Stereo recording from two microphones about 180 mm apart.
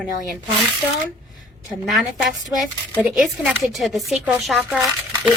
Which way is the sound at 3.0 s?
5° right (ahead or behind).